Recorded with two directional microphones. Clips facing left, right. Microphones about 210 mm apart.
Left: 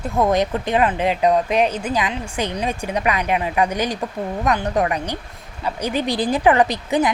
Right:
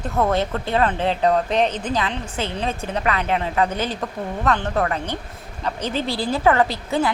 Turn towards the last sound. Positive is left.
turn(degrees=15)  # may be behind; listen again after turning